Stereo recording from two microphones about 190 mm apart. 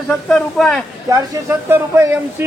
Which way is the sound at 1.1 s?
15° right (ahead or behind).